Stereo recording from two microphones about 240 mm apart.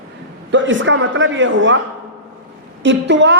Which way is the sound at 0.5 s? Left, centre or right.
Right.